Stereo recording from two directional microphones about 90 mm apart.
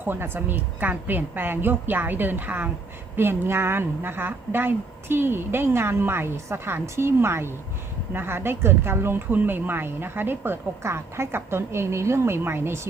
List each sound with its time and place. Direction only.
0.0 s a woman's voice: 25° right (ahead or behind)